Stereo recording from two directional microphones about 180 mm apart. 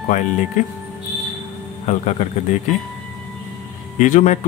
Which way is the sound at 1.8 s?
40° left (ahead or behind).